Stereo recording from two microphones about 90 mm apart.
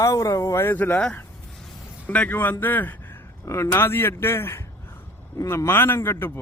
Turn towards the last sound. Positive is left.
turn(degrees=25)  # may be behind; listen again after turning